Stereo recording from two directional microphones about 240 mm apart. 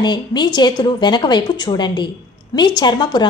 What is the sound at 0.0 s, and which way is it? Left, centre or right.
A woman's voice, centre.